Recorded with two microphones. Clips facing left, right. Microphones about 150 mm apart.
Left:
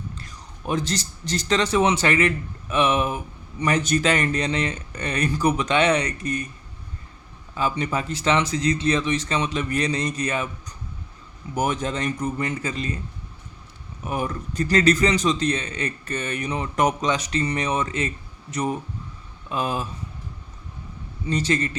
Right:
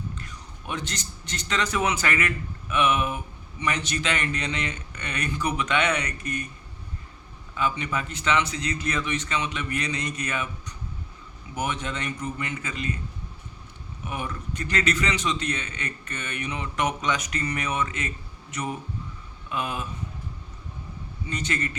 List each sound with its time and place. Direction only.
0.2 s a man's voice: 35° left (ahead or behind)
7.5 s a man's voice: 35° left (ahead or behind)
11.5 s a man's voice: 40° left (ahead or behind)
14.0 s a man's voice: 40° left (ahead or behind)
19.5 s a man's voice: 35° left (ahead or behind)
21.2 s a man's voice: 35° left (ahead or behind)